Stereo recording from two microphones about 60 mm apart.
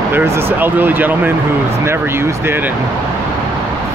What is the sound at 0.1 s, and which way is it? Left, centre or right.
Speech, right.